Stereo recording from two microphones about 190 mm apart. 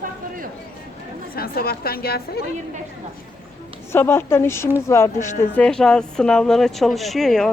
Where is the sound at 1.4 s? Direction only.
50° left (ahead or behind).